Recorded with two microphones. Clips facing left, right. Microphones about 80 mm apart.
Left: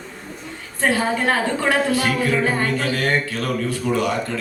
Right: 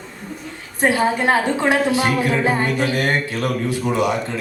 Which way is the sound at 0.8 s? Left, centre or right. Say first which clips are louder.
Right 2 dB; centre.